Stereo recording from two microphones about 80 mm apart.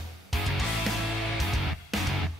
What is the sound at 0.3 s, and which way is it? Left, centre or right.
Music, centre.